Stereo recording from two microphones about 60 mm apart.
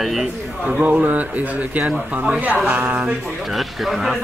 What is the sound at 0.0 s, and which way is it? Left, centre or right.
Speech, centre.